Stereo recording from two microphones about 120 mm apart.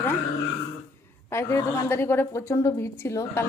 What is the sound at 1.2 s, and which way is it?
Speech, 20° left (ahead or behind).